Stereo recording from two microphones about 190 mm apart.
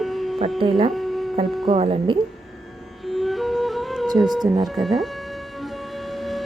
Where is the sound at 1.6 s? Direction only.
25° right (ahead or behind).